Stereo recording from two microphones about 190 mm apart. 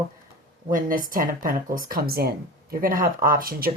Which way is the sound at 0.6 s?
45° right (ahead or behind).